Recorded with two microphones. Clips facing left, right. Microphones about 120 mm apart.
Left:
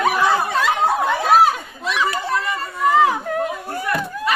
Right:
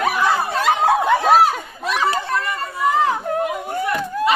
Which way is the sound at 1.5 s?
45° right (ahead or behind).